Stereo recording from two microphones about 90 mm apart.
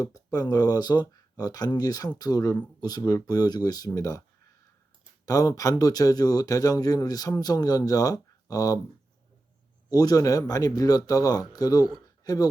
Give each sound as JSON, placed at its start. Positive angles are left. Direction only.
{"t": 0.0, "sound": "speech", "side_deg": 45}
{"t": 3.0, "sound": "speech", "side_deg": 30}
{"t": 3.2, "sound": "speech", "side_deg": 45}
{"t": 5.2, "sound": "speech", "side_deg": 40}
{"t": 9.9, "sound": "speech", "side_deg": 45}